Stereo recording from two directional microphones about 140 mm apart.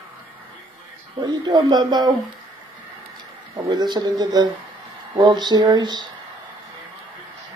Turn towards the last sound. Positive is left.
turn(degrees=-30)  # may be behind; listen again after turning